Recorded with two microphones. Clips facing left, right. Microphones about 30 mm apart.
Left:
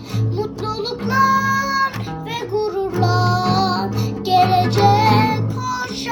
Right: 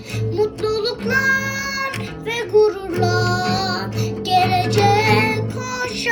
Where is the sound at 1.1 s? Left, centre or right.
Right.